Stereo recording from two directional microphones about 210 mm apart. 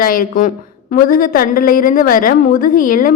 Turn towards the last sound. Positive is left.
turn(degrees=40)  # may be behind; listen again after turning